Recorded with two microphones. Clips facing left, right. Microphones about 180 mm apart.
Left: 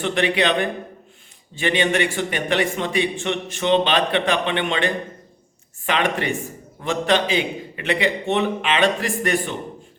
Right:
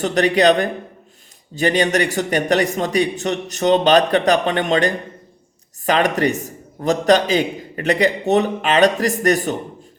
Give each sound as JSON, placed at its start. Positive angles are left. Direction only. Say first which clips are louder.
{"t": 0.0, "sound": "a man's voice", "louder": "right 5 dB", "side_deg": -40}